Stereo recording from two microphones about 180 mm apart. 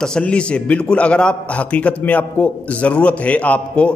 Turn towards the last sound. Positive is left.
turn(degrees=5)  # may be behind; listen again after turning